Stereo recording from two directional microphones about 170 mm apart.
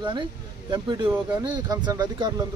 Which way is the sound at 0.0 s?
25° right (ahead or behind).